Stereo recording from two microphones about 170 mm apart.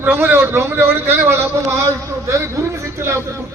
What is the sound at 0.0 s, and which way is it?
A man's voice, 10° right (ahead or behind).